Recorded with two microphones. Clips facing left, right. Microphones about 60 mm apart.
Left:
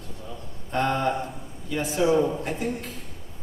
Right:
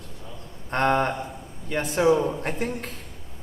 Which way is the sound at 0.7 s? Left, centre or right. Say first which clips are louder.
Right 2 dB; right.